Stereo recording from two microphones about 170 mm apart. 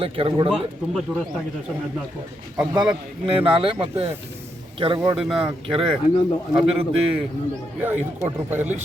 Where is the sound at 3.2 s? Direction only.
30° right (ahead or behind).